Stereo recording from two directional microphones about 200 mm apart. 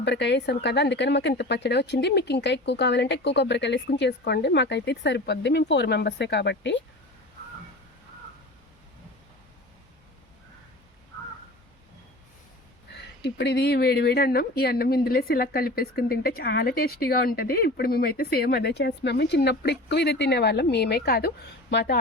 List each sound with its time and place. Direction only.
0.0 s speech: 60° left (ahead or behind)
12.9 s speech: 55° left (ahead or behind)